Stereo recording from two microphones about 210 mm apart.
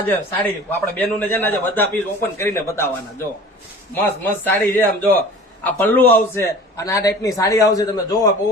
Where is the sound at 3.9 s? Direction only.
10° left (ahead or behind).